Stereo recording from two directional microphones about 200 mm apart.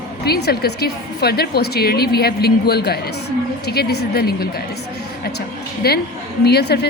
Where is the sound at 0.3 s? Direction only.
55° left (ahead or behind).